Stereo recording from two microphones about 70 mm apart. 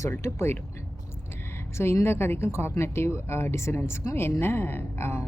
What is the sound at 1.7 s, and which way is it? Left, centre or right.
A woman's voice, left.